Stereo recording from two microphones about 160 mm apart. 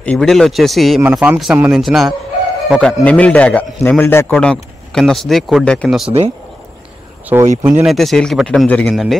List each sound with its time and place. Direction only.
0.0 s a man's voice: 5° left (ahead or behind)
6.0 s speech: 40° right (ahead or behind)
7.3 s speech: 10° right (ahead or behind)
7.8 s speech: centre (ahead or behind)